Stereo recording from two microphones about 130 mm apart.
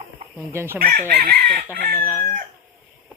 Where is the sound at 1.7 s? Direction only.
10° left (ahead or behind).